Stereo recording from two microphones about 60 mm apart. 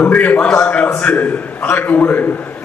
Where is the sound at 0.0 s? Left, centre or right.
Left.